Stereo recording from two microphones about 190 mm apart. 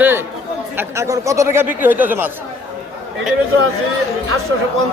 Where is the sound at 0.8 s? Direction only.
15° right (ahead or behind).